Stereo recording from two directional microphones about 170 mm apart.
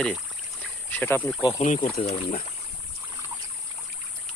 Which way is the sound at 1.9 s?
35° left (ahead or behind).